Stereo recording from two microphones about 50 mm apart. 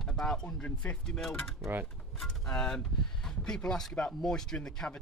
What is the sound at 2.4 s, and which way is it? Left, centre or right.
Speech, left.